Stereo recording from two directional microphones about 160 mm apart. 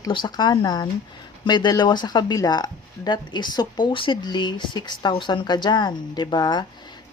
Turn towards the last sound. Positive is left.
turn(degrees=25)  # may be behind; listen again after turning